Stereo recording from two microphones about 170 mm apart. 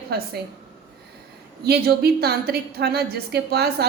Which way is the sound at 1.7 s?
65° right (ahead or behind).